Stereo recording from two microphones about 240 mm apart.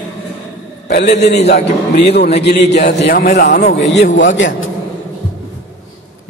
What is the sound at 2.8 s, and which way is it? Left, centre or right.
A man's voice, left.